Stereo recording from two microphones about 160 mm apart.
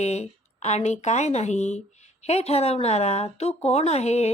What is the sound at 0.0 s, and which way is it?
A woman's voice, 45° left (ahead or behind).